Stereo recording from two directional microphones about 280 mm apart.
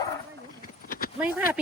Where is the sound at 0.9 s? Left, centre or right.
Left.